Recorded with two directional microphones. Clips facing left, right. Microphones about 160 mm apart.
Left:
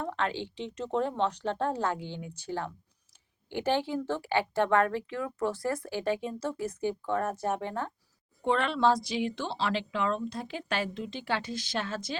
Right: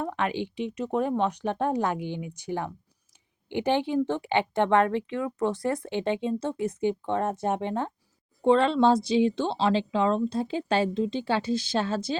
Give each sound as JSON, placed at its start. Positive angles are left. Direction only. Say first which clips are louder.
{"t": 0.0, "sound": "speech", "louder": "right 3 dB", "side_deg": -15}